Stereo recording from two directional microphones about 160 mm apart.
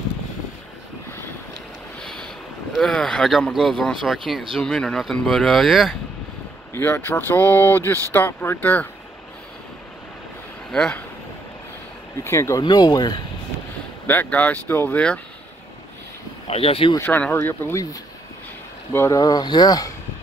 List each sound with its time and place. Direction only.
2.0 s boat: 5° left (ahead or behind)
2.7 s speech: centre (ahead or behind)
6.7 s speech: 15° left (ahead or behind)
12.2 s speech: 15° left (ahead or behind)
14.0 s speech: 10° left (ahead or behind)
16.4 s speech: 40° left (ahead or behind)
16.9 s speech: 15° left (ahead or behind)
18.9 s speech: 20° left (ahead or behind)